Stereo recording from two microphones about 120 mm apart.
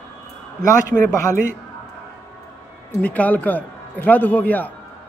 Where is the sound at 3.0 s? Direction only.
10° left (ahead or behind).